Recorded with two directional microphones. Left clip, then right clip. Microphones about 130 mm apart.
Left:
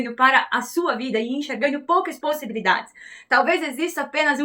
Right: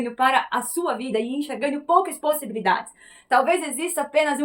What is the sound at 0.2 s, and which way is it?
A woman's voice, 35° right (ahead or behind).